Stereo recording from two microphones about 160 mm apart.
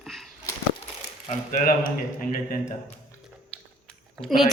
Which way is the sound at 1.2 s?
55° left (ahead or behind).